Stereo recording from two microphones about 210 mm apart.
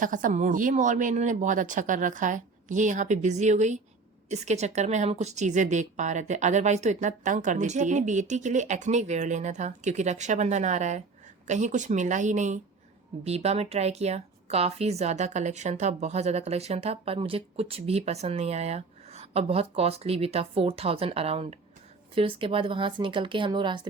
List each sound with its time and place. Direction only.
0.0 s a woman's voice: 40° right (ahead or behind); by 23.8 s 20° right (ahead or behind)